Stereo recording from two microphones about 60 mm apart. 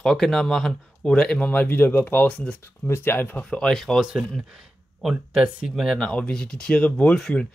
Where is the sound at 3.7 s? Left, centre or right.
Centre.